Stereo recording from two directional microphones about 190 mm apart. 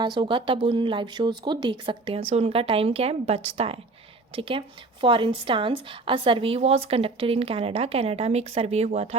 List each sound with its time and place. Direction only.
0.0 s a woman's voice: 25° right (ahead or behind)